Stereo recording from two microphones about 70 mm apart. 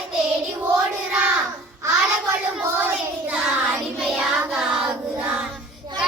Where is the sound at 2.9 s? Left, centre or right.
Centre.